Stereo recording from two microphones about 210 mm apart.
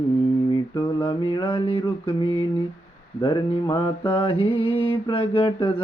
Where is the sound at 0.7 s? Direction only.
20° left (ahead or behind).